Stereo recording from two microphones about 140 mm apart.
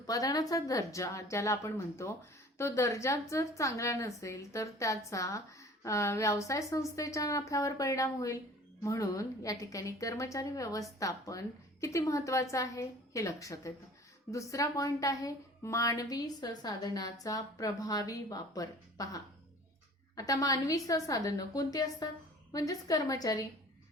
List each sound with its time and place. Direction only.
0.0 s a woman's voice: 25° left (ahead or behind)